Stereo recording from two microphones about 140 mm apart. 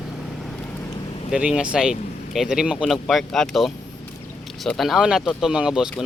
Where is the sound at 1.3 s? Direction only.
5° right (ahead or behind).